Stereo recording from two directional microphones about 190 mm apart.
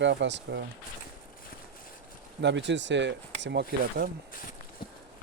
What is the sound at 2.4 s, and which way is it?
Speech, 70° right (ahead or behind).